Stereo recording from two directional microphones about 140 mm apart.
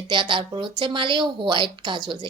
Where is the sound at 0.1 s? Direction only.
35° right (ahead or behind).